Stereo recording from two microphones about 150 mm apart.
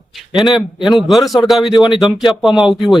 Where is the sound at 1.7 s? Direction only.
30° left (ahead or behind).